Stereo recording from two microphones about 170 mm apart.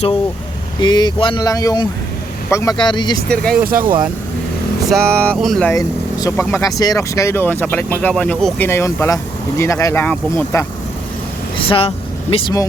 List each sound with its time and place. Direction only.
0.8 s speech: 25° left (ahead or behind)
3.2 s speech: 5° left (ahead or behind)
3.6 s speech: 60° right (ahead or behind)
4.9 s speech: centre (ahead or behind)
5.7 s speech: 20° left (ahead or behind)
11.5 s speech: 30° left (ahead or behind)